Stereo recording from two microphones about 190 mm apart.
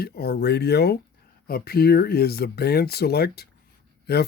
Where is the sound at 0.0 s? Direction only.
55° left (ahead or behind).